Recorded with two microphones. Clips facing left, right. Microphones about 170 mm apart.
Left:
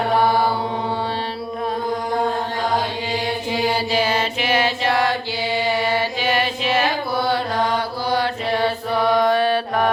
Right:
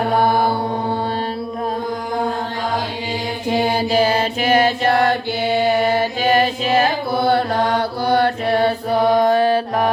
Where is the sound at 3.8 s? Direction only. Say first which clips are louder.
Right 4 dB; 45° right (ahead or behind).